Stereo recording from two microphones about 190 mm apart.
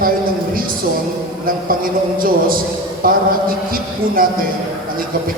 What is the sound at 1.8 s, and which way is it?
A man's voice, 50° right (ahead or behind).